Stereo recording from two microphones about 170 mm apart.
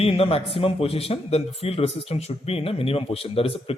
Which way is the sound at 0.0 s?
35° left (ahead or behind).